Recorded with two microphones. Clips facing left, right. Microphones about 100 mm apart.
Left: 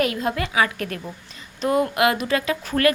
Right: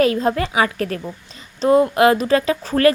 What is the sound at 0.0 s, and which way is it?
A woman's voice, 35° right (ahead or behind).